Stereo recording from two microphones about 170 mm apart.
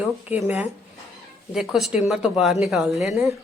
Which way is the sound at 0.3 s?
10° right (ahead or behind).